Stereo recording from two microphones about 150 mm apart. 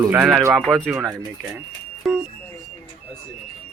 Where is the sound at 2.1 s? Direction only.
Centre (ahead or behind).